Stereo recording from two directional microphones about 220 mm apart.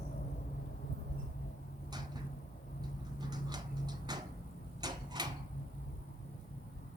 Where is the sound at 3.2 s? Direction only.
20° right (ahead or behind).